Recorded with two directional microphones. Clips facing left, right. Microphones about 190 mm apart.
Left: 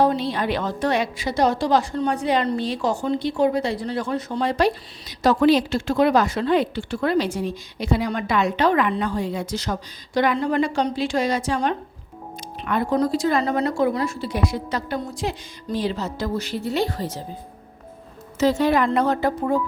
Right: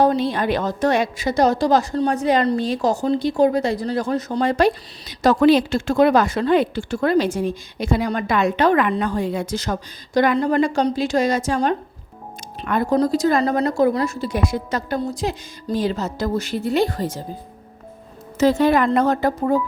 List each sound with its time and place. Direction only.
0.0 s a woman's voice: 45° right (ahead or behind)
18.3 s a woman's voice: 50° right (ahead or behind)